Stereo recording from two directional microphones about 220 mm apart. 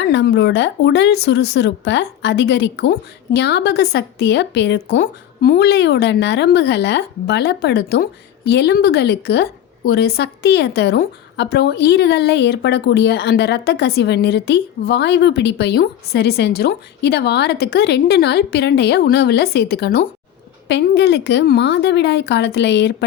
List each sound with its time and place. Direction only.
0.0 s speech: 50° left (ahead or behind)